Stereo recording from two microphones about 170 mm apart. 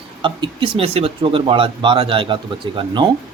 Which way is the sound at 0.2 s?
30° right (ahead or behind).